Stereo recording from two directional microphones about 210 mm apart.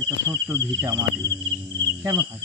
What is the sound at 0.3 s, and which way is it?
Speech, 15° right (ahead or behind).